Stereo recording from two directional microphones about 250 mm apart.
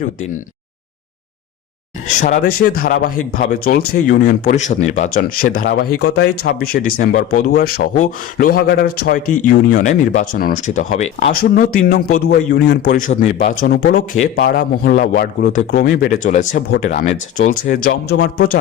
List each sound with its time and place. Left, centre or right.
2.2 s speech: left